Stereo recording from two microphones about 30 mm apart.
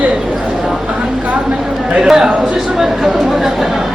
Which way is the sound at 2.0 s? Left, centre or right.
Right.